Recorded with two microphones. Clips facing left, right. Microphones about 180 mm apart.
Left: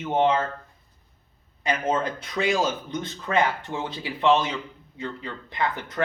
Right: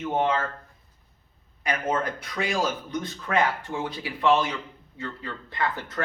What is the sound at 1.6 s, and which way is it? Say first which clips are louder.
Speech: left 2 dB; 20° left (ahead or behind).